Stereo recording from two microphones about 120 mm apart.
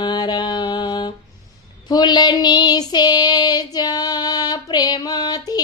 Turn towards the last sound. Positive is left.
turn(degrees=35)  # may be behind; listen again after turning